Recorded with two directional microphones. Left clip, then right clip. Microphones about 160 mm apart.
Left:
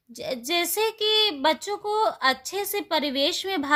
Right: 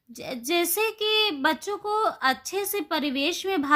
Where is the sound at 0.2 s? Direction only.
30° left (ahead or behind).